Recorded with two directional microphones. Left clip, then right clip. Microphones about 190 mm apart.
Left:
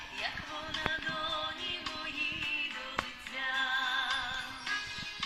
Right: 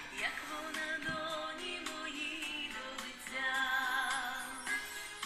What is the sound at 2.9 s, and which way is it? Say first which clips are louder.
Music: left 4 dB; 30° left (ahead or behind).